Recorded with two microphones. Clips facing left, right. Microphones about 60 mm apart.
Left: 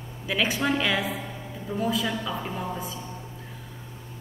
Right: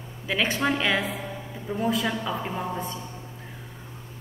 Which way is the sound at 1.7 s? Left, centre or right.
Right.